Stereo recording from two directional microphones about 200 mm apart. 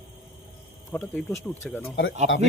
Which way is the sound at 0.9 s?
10° left (ahead or behind).